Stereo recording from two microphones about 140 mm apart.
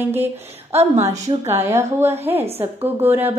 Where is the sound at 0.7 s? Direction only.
50° right (ahead or behind).